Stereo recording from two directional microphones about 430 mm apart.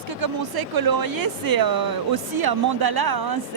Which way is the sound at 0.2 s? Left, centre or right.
Right.